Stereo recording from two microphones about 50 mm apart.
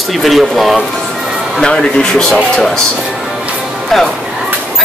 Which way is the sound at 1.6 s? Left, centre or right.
Centre.